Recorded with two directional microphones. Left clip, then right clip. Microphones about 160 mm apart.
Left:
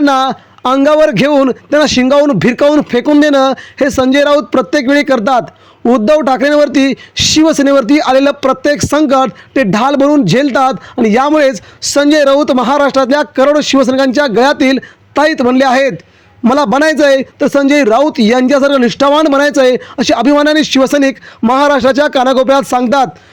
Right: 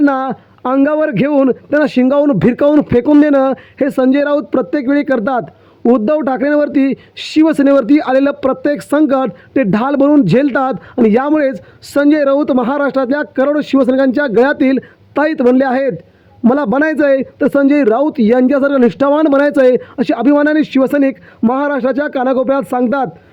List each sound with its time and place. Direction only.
0.0 s speech: 35° left (ahead or behind)